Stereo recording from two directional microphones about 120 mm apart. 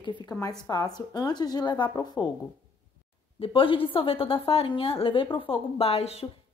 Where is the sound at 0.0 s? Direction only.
40° left (ahead or behind).